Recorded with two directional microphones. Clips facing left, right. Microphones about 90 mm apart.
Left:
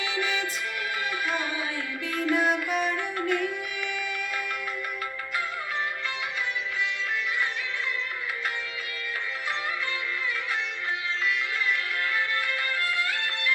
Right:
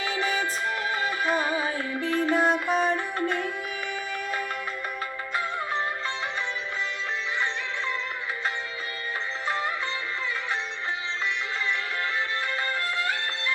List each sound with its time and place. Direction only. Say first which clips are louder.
0.0 s music: right 2 dB; 40° right (ahead or behind)